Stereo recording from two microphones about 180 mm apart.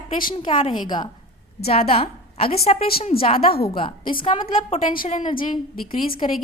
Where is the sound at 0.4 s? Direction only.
25° left (ahead or behind).